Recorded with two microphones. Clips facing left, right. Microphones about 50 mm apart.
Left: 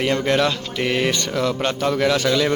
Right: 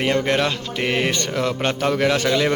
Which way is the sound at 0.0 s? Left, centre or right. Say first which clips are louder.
Left 1 dB; right.